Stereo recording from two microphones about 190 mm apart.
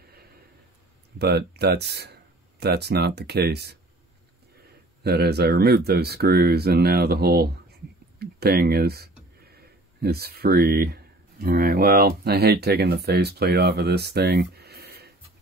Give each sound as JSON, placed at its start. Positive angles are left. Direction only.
{"t": 1.1, "sound": "speech", "side_deg": -60}
{"t": 5.0, "sound": "speech", "side_deg": -60}